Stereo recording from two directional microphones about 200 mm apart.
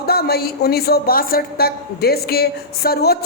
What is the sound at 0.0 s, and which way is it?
A woman's voice, 50° left (ahead or behind).